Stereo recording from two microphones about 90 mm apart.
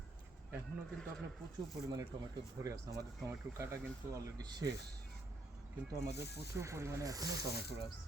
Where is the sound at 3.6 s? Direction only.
35° right (ahead or behind).